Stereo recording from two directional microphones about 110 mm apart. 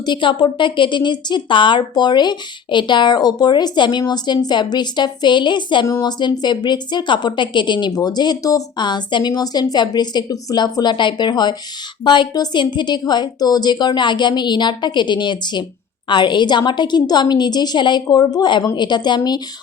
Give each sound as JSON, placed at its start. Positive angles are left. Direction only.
{"t": 0.0, "sound": "a woman's voice", "side_deg": 45}